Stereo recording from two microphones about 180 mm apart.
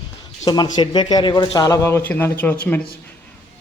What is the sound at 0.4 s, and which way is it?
Speech, 25° left (ahead or behind).